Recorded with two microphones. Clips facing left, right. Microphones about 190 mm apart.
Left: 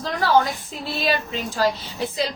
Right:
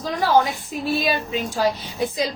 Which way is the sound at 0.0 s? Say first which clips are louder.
Right 1 dB; 15° right (ahead or behind).